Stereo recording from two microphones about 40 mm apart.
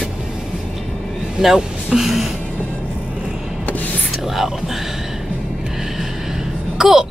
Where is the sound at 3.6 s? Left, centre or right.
Left.